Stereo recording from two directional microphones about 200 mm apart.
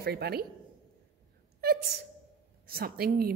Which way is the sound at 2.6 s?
50° right (ahead or behind).